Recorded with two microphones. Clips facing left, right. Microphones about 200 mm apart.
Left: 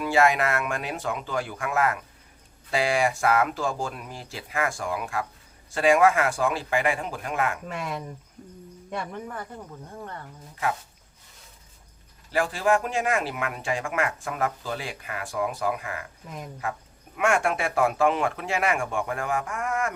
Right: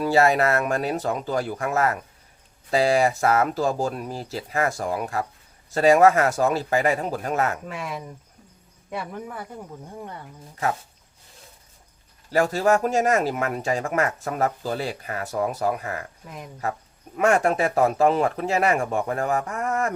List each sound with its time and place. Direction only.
0.0 s speech: 35° right (ahead or behind)
7.6 s speech: centre (ahead or behind)
12.3 s speech: 40° right (ahead or behind)